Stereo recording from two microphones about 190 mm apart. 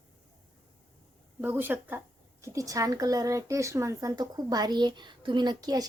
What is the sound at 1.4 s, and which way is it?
Speech, 10° right (ahead or behind).